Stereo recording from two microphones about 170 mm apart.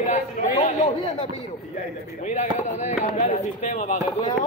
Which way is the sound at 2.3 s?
40° left (ahead or behind).